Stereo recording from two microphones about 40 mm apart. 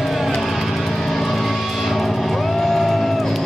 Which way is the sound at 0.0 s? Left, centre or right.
Centre.